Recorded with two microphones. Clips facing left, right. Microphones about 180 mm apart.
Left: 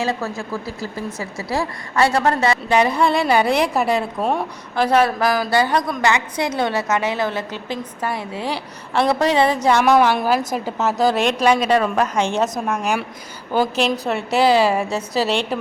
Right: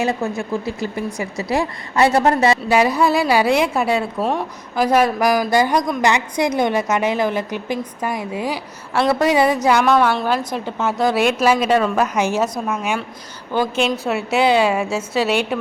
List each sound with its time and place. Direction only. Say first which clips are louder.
0.0 s a woman's voice: right 3 dB; 20° right (ahead or behind)
2.6 s a woman's voice: right 1 dB; 5° right (ahead or behind)
9.8 s a woman's voice: left 1 dB; 10° left (ahead or behind)
14.1 s a woman's voice: left 1 dB; centre (ahead or behind)